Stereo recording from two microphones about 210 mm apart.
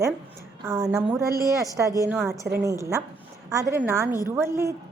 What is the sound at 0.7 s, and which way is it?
A woman's voice, 15° right (ahead or behind).